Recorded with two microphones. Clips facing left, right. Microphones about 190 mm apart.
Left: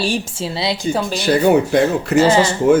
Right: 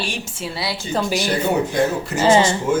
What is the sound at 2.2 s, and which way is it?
Speech, 20° right (ahead or behind).